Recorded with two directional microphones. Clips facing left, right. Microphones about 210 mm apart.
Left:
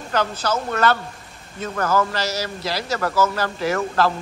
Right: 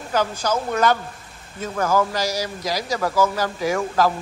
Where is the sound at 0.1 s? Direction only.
10° right (ahead or behind).